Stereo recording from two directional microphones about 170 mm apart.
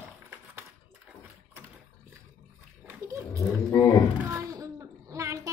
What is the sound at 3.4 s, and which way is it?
Roaring cats, 20° left (ahead or behind).